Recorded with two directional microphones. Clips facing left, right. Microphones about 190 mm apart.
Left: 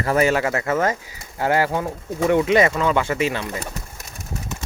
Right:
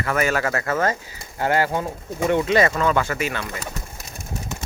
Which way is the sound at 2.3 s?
20° left (ahead or behind).